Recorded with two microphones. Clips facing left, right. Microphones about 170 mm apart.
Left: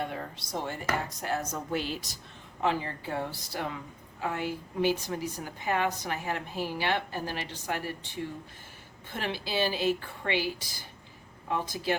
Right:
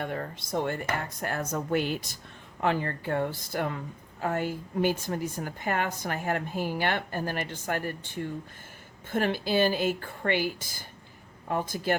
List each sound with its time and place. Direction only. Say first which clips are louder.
0.0 s a woman's voice: right 2 dB; 55° right (ahead or behind)